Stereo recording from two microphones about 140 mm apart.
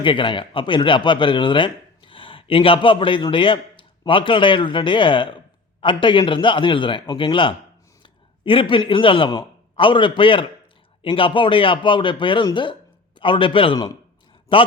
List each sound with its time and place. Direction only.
0.0 s a man's voice: 35° left (ahead or behind)